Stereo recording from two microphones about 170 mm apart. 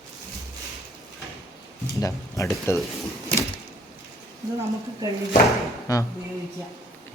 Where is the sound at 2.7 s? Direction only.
15° left (ahead or behind).